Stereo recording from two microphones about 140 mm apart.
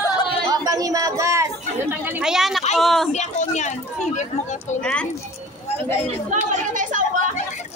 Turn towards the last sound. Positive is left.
turn(degrees=-65)  # may be behind; listen again after turning